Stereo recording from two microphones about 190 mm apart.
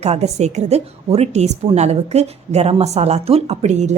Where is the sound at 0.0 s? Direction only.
35° right (ahead or behind).